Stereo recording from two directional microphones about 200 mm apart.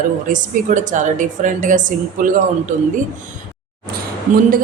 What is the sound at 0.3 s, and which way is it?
A woman's voice, 40° right (ahead or behind).